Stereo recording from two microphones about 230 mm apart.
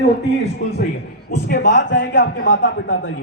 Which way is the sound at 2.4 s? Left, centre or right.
Left.